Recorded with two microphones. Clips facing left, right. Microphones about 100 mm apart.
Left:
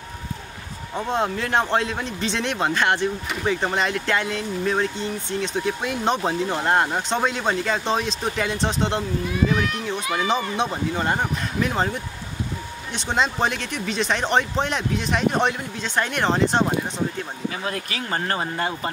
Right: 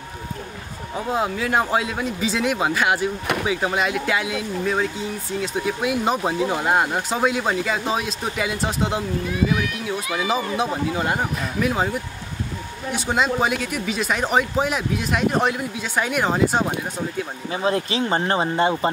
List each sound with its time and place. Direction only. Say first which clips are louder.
0.9 s speech: even; 5° right (ahead or behind)
17.5 s speech: right 9 dB; 25° right (ahead or behind)